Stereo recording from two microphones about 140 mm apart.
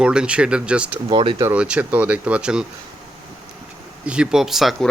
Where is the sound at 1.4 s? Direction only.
10° right (ahead or behind).